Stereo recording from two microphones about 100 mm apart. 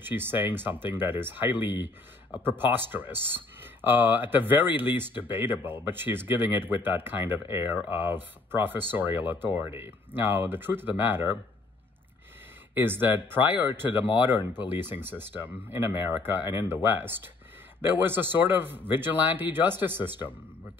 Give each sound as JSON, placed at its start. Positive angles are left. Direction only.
{"t": 0.0, "sound": "speech", "side_deg": -20}
{"t": 12.7, "sound": "speech", "side_deg": -20}